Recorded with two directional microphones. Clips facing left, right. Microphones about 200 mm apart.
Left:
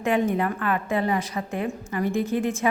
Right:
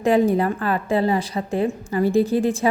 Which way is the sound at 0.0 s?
35° right (ahead or behind).